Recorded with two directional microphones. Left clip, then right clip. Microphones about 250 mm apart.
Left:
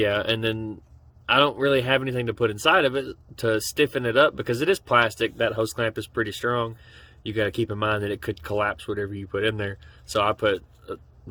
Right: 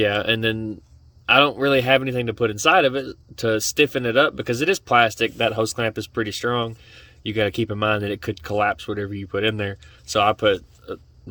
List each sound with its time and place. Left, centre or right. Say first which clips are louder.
0.0 s speech: right 3 dB; right